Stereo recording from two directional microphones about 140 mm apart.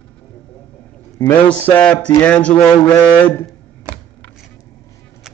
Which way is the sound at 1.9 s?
5° left (ahead or behind).